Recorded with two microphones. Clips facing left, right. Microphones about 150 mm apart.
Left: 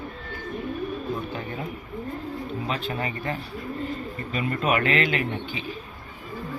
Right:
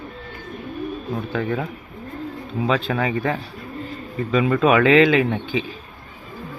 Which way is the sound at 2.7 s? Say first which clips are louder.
Right 7 dB; 90° right.